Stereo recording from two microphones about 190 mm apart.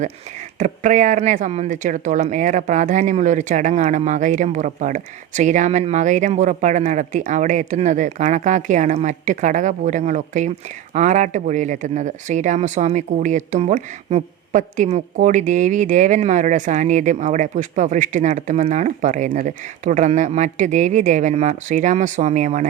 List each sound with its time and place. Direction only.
0.6 s speech: 40° right (ahead or behind)